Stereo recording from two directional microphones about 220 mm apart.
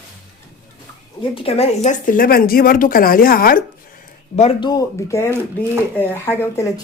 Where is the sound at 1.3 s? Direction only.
25° left (ahead or behind); by 3.6 s 40° left (ahead or behind).